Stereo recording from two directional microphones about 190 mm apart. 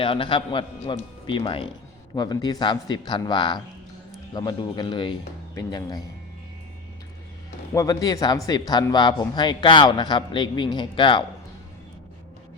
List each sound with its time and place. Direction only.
0.0 s speech: 25° left (ahead or behind)
7.7 s speech: 15° left (ahead or behind)